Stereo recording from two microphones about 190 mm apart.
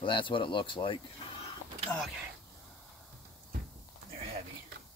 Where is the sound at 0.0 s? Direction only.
25° left (ahead or behind).